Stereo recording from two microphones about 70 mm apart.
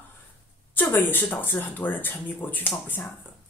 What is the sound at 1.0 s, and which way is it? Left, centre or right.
Speech, left.